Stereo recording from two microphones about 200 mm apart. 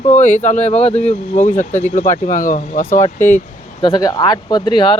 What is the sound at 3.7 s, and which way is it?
Speech, 25° left (ahead or behind).